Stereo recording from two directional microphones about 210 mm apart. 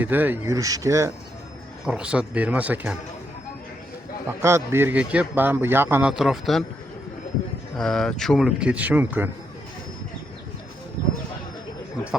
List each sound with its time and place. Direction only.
0.0 s a man's voice: 10° right (ahead or behind)
4.3 s a man's voice: 10° right (ahead or behind)
7.8 s speech: centre (ahead or behind)